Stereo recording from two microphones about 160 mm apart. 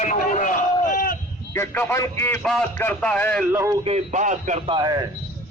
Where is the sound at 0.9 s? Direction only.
60° left (ahead or behind).